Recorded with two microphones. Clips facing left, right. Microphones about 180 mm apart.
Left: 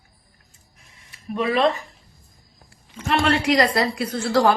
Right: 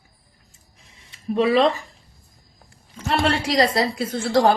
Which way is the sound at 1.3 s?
30° right (ahead or behind).